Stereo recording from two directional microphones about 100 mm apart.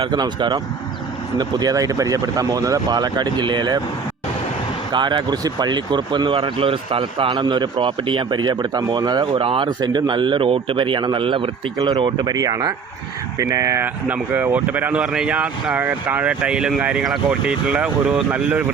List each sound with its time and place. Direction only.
0.0 s a man's voice: 50° right (ahead or behind)
4.9 s a man's voice: 50° right (ahead or behind)
9.6 s speech: 45° right (ahead or behind); by 11.5 s 60° right (ahead or behind)
12.2 s speech: 40° right (ahead or behind)
13.8 s speech: 15° right (ahead or behind)